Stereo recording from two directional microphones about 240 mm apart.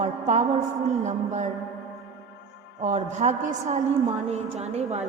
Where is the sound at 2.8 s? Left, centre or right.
Right.